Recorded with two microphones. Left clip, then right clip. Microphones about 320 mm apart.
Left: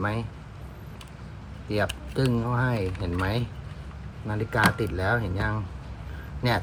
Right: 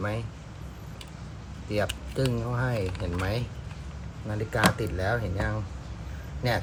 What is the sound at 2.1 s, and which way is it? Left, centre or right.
Speech, centre.